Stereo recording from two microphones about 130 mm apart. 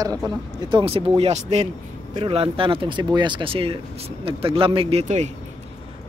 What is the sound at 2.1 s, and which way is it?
Speech, 45° right (ahead or behind).